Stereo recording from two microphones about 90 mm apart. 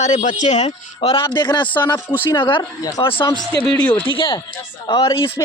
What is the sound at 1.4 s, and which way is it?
Speech, 60° left (ahead or behind).